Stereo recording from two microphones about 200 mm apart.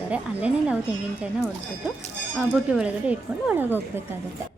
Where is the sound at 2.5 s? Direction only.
5° right (ahead or behind).